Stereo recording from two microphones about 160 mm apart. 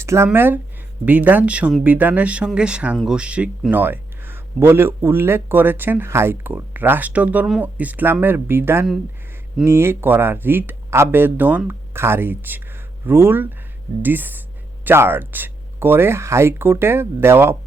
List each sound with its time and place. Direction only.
0.0 s speech: 15° right (ahead or behind)